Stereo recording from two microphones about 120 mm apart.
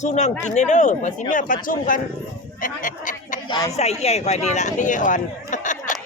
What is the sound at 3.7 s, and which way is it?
Speech, 60° left (ahead or behind).